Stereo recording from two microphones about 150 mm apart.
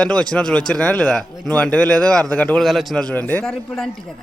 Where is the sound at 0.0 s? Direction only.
5° left (ahead or behind).